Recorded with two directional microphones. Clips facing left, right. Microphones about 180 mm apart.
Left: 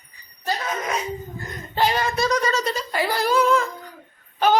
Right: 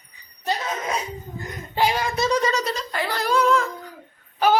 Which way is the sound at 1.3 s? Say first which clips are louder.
Right 1 dB; 10° right (ahead or behind).